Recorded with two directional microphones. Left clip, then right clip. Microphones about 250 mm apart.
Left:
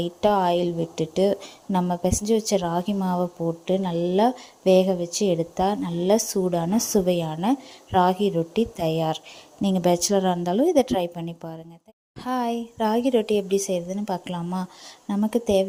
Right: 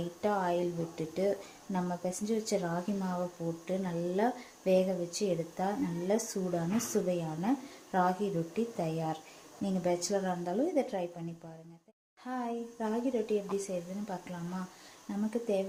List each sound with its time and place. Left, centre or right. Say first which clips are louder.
0.2 s a woman's voice: left 11 dB; left